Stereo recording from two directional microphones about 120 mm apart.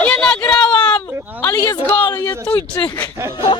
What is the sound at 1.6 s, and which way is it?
Speech, 30° left (ahead or behind).